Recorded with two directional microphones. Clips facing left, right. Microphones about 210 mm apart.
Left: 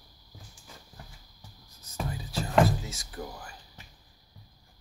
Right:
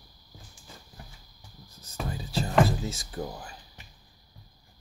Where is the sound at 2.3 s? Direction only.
30° right (ahead or behind).